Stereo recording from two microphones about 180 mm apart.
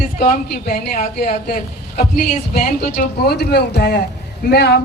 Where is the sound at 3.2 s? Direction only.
60° left (ahead or behind).